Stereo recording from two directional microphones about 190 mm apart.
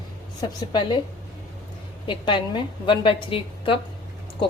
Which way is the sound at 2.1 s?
25° left (ahead or behind).